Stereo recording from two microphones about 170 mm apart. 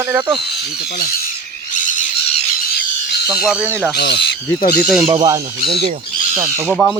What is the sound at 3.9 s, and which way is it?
Speech, 80° left.